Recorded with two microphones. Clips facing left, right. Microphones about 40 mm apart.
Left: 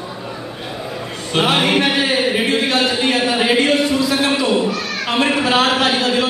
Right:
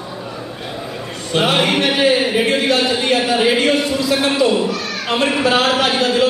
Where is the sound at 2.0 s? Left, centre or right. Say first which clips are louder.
Right 2 dB; centre.